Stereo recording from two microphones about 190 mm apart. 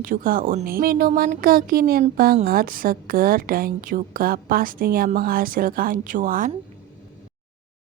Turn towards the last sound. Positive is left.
turn(degrees=-45)  # may be behind; listen again after turning